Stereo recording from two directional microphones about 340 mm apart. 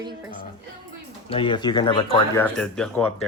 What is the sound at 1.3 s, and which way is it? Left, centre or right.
Speech, centre.